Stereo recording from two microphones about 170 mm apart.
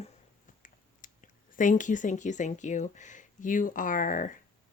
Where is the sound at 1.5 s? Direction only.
50° left (ahead or behind).